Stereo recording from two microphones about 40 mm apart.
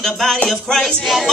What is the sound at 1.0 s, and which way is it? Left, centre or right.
Speech, centre.